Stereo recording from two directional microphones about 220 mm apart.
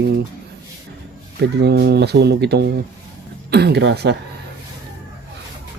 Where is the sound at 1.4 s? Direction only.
50° right (ahead or behind).